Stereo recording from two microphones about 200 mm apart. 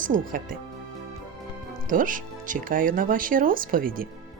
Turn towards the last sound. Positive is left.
turn(degrees=-45)  # may be behind; listen again after turning